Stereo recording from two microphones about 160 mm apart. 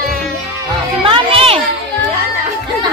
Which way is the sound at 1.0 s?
35° right (ahead or behind).